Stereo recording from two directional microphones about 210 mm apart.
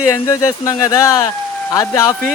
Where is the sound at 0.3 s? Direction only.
15° left (ahead or behind).